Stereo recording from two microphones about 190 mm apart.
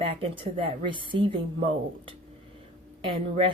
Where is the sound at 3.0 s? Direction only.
30° right (ahead or behind).